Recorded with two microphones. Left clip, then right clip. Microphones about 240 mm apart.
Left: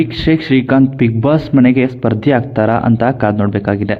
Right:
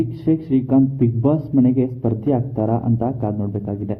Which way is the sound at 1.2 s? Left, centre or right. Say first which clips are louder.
Left 7 dB; left.